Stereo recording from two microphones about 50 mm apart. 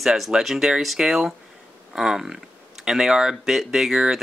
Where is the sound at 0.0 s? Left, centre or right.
Centre.